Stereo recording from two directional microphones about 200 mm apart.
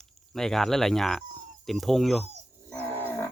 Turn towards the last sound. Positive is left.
turn(degrees=10)  # may be behind; listen again after turning